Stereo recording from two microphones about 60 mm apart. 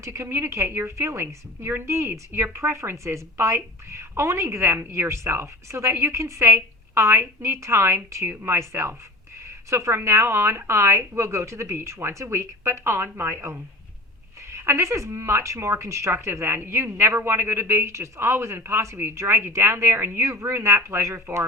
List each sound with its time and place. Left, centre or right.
0.0 s a woman's voice: right